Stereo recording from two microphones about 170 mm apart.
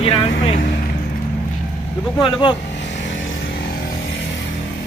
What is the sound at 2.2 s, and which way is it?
Speech, 30° left (ahead or behind).